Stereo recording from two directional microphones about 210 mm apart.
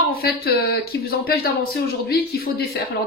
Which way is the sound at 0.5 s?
45° left (ahead or behind).